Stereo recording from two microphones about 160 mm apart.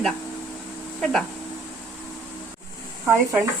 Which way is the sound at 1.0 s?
5° left (ahead or behind).